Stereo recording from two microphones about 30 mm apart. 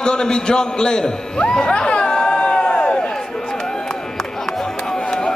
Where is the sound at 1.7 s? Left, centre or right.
Left.